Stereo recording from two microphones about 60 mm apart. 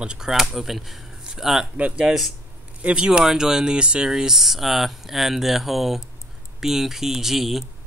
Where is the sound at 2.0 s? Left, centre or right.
Centre.